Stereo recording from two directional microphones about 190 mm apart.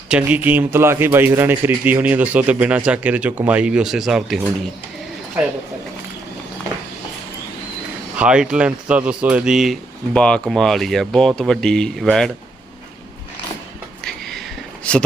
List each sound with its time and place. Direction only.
0.1 s a man's voice: 10° right (ahead or behind)
8.2 s speech: 5° right (ahead or behind)
14.0 s a sound: centre (ahead or behind)